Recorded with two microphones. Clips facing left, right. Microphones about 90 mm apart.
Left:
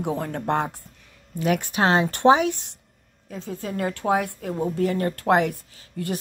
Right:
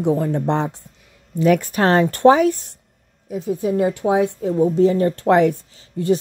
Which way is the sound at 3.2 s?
15° right (ahead or behind).